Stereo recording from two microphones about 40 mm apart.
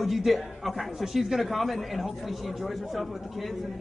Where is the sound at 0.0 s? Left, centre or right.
Centre.